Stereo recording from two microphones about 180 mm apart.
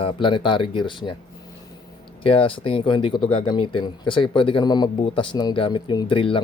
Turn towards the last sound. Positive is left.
turn(degrees=30)  # may be behind; listen again after turning